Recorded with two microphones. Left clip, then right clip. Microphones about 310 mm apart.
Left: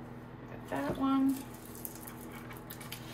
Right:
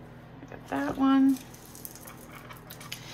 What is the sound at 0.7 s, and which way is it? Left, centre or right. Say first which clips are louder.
Speech: right 6 dB; centre.